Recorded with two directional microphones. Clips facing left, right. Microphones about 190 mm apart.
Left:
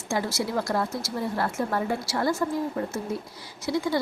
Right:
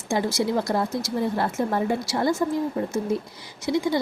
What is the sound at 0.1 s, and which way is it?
A woman's voice, 20° right (ahead or behind).